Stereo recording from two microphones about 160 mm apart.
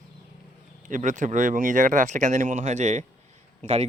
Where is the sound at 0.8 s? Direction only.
50° right (ahead or behind).